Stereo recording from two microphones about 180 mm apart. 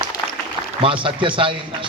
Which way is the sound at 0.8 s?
30° right (ahead or behind).